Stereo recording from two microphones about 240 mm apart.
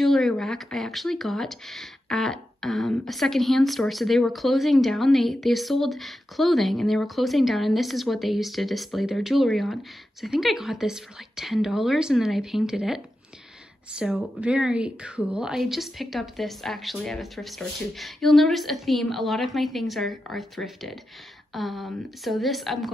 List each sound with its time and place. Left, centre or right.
0.0 s speech: centre